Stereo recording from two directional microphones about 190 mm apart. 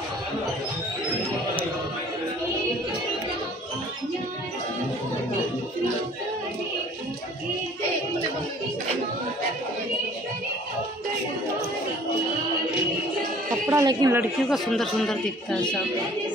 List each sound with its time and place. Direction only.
13.7 s a man's voice: 15° right (ahead or behind)
14.5 s speech: centre (ahead or behind)